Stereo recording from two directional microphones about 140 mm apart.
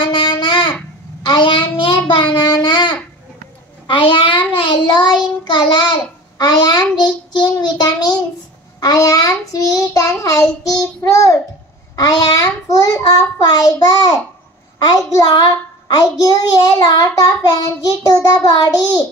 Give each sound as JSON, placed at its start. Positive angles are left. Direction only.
{"t": 0.0, "sound": "babbling", "side_deg": 35}
{"t": 1.2, "sound": "child singing", "side_deg": 35}
{"t": 2.6, "sound": "babbling", "side_deg": 35}
{"t": 3.8, "sound": "child singing", "side_deg": 35}
{"t": 7.3, "sound": "a sound", "side_deg": 30}
{"t": 8.7, "sound": "child singing", "side_deg": 25}
{"t": 14.9, "sound": "a child's voice", "side_deg": 35}
{"t": 16.0, "sound": "child singing", "side_deg": 30}